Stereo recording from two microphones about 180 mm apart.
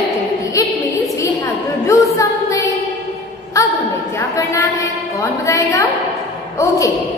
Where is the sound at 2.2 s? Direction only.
20° left (ahead or behind).